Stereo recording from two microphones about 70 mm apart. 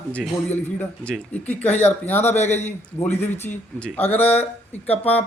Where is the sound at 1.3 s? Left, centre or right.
Left.